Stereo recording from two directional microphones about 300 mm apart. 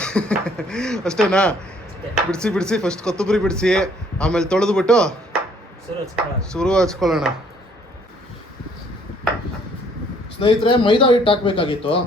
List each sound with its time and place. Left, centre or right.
0.0 s speech: centre
6.5 s speech: centre
10.4 s a man's voice: centre